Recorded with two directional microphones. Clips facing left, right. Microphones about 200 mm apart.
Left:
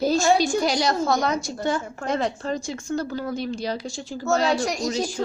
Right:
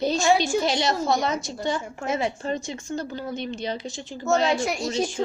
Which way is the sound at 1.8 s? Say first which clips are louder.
Left 1 dB; 10° right (ahead or behind).